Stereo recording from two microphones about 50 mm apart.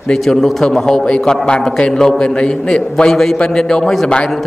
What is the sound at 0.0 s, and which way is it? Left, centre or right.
A man's voice, centre.